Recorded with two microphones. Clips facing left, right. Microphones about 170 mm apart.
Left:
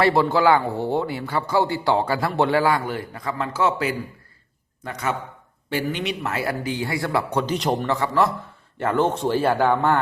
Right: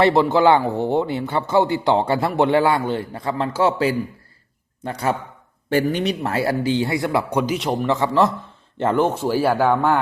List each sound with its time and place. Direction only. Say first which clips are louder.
0.0 s a man's voice: right 3 dB; 20° right (ahead or behind); by 7.9 s centre (ahead or behind)
7.9 s a man's voice: right 6 dB; 20° right (ahead or behind)
9.0 s speech: right 1 dB; 5° right (ahead or behind)